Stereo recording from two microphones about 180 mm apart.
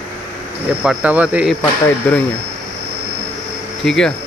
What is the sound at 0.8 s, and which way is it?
Speech, 10° right (ahead or behind).